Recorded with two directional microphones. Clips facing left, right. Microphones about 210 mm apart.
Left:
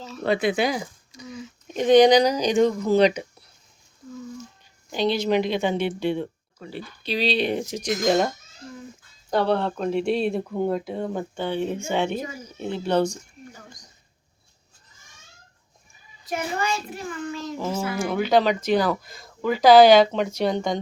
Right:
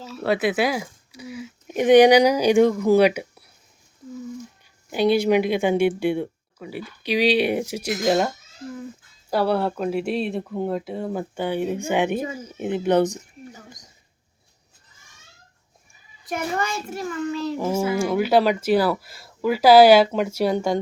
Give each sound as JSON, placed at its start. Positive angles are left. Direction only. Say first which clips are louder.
{"t": 0.0, "sound": "speech", "louder": "right 1 dB", "side_deg": -5}
{"t": 4.9, "sound": "speech", "louder": "right 4 dB", "side_deg": -10}
{"t": 9.3, "sound": "speech", "louder": "right 1 dB", "side_deg": -5}
{"t": 16.2, "sound": "child singing", "louder": "right 1 dB", "side_deg": -50}
{"t": 17.6, "sound": "speech", "louder": "right 4 dB", "side_deg": -10}